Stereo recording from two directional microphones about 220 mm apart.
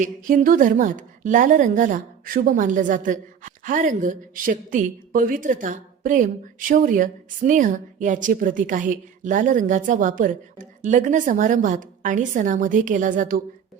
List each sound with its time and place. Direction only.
0.0 s a woman's voice: 35° right (ahead or behind)